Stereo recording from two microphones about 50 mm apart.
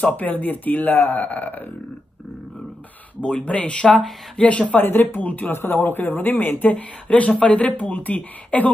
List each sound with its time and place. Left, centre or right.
0.0 s speech: left
3.3 s speech: centre
4.7 s speech: left
5.5 s speech: left